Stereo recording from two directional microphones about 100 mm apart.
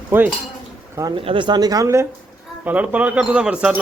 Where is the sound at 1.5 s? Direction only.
45° right (ahead or behind).